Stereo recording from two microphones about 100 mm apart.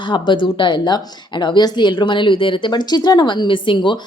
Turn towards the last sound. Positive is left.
turn(degrees=50)  # may be behind; listen again after turning